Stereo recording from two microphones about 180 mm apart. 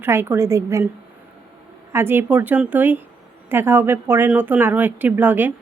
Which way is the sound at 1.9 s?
15° right (ahead or behind).